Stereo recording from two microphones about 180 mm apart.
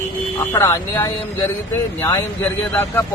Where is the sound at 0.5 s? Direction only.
15° left (ahead or behind).